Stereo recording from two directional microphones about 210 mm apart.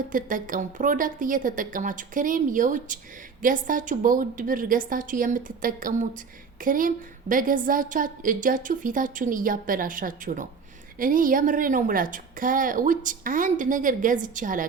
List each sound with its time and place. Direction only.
0.1 s a woman's voice: 40° right (ahead or behind)